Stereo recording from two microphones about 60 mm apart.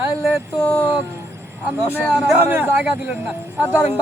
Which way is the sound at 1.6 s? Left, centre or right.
Right.